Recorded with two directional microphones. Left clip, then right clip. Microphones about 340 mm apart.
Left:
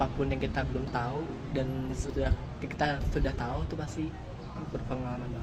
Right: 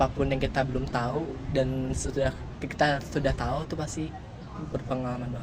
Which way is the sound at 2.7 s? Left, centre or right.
Right.